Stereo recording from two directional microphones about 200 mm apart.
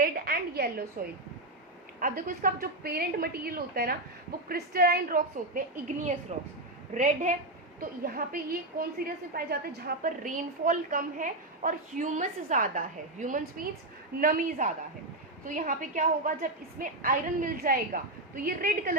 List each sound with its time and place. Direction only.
0.0 s a sound: 50° right (ahead or behind)
2.0 s a woman's voice: 45° right (ahead or behind)
6.3 s a woman's voice: 35° right (ahead or behind)